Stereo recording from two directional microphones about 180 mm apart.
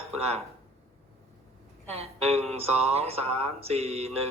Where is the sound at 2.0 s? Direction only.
35° right (ahead or behind).